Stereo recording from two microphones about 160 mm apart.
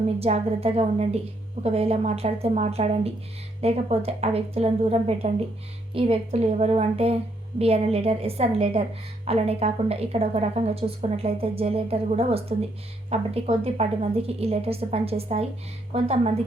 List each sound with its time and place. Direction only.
0.2 s a woman's voice: 40° right (ahead or behind)